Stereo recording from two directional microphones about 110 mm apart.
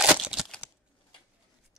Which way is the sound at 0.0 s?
5° right (ahead or behind).